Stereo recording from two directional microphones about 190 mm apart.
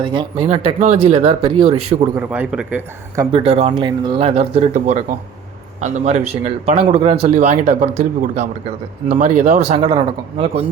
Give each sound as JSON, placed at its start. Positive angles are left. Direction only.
{"t": 0.0, "sound": "speech", "side_deg": -25}
{"t": 0.4, "sound": "speech", "side_deg": -35}
{"t": 2.1, "sound": "a man's voice", "side_deg": -5}
{"t": 3.3, "sound": "speech", "side_deg": -30}